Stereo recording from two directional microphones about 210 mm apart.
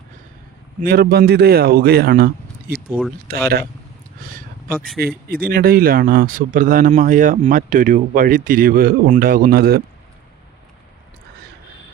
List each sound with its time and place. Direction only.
0.8 s a man's voice: 45° right (ahead or behind)
4.2 s a sound: 40° right (ahead or behind)
4.9 s speech: 45° right (ahead or behind)